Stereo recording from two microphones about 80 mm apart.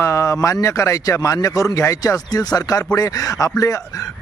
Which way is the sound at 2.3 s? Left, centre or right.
Left.